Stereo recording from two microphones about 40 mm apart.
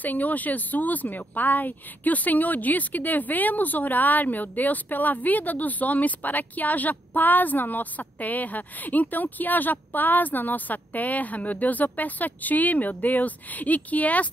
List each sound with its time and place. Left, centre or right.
0.0 s speech: left